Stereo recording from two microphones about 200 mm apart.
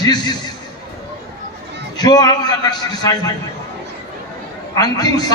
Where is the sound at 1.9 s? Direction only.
20° left (ahead or behind).